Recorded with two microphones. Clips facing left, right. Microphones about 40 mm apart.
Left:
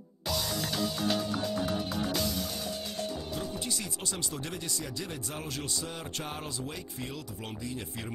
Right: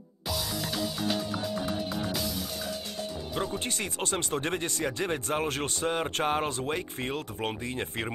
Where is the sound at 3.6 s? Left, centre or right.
Right.